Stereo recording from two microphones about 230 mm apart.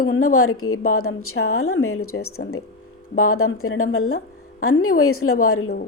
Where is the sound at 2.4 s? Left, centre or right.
Left.